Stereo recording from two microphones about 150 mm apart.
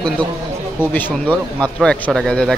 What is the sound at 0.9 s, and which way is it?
Speech, 10° left (ahead or behind).